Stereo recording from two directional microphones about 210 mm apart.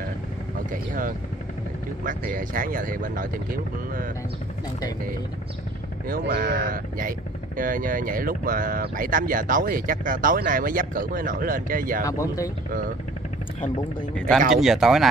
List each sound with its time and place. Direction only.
0.7 s speech: 40° right (ahead or behind)
6.0 s speech: 40° right (ahead or behind)
12.0 s speech: 15° left (ahead or behind)
14.5 s speech: centre (ahead or behind)